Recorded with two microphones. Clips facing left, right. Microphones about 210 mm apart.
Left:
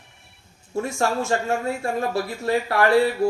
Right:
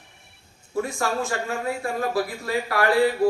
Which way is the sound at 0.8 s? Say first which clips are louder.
Left 7 dB; 25° left (ahead or behind).